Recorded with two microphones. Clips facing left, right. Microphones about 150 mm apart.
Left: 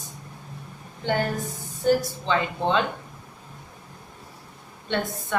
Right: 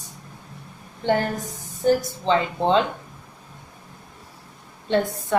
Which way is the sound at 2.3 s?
30° right (ahead or behind).